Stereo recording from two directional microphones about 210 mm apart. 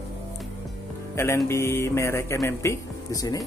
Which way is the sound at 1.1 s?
15° left (ahead or behind).